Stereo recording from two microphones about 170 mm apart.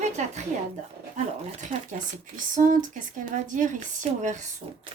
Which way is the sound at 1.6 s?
50° right (ahead or behind).